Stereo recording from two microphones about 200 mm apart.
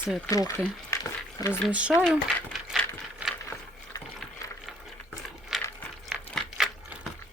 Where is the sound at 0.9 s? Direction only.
15° left (ahead or behind).